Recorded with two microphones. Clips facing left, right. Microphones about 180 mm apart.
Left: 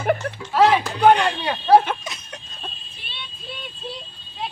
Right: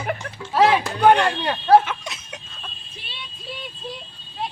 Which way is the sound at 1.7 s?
35° left (ahead or behind).